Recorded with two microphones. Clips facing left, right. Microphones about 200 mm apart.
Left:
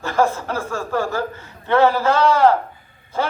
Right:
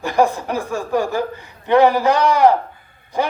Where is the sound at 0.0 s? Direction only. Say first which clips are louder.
Right 2 dB; 15° right (ahead or behind).